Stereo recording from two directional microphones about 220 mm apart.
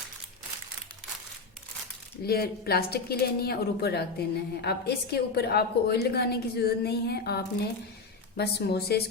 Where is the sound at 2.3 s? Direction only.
45° left (ahead or behind).